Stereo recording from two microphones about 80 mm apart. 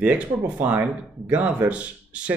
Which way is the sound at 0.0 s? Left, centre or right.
Right.